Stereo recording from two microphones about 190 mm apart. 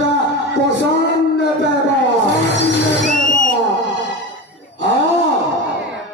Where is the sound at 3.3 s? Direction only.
45° left (ahead or behind).